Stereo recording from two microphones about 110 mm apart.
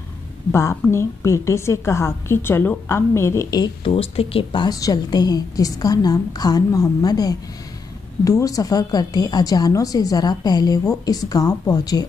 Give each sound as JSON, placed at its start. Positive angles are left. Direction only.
{"t": 0.5, "sound": "a woman's voice", "side_deg": 25}
{"t": 3.8, "sound": "speech", "side_deg": 60}
{"t": 4.7, "sound": "a woman's voice", "side_deg": 35}